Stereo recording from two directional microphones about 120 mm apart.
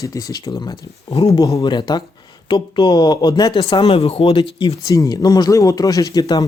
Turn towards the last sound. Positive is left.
turn(degrees=30)  # may be behind; listen again after turning